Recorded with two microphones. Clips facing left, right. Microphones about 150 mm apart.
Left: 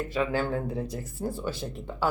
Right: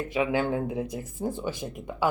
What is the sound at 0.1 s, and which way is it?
Speech, 15° right (ahead or behind).